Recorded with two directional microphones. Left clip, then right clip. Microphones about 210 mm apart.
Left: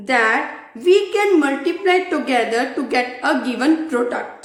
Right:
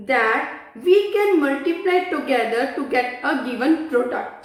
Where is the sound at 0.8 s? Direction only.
55° left (ahead or behind).